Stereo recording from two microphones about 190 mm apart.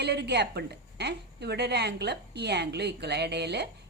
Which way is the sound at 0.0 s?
60° right (ahead or behind).